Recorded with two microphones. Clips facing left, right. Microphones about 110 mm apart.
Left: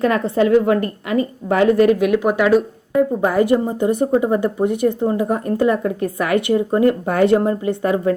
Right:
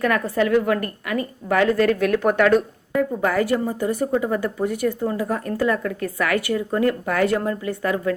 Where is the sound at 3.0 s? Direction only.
20° left (ahead or behind).